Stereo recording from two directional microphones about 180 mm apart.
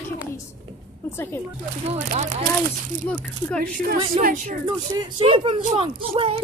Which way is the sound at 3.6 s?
50° right (ahead or behind).